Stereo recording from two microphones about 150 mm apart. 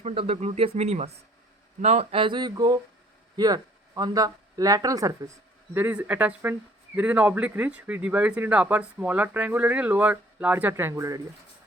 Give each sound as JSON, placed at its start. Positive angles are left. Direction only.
{"t": 0.0, "sound": "speech", "side_deg": -40}